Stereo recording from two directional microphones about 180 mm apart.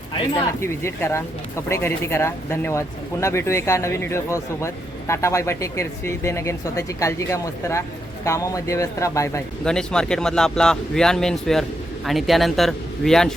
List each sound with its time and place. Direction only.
0.6 s speech: 15° left (ahead or behind)
9.6 s speech: 5° left (ahead or behind)